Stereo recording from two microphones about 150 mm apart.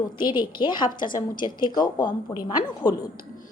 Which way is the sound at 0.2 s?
30° left (ahead or behind).